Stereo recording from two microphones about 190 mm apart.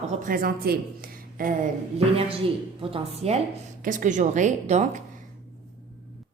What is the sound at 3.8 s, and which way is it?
A woman's voice, 45° right (ahead or behind).